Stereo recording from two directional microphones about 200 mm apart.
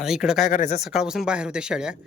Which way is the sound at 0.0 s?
5° right (ahead or behind).